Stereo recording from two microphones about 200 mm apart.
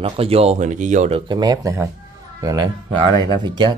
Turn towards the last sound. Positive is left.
turn(degrees=-20)  # may be behind; listen again after turning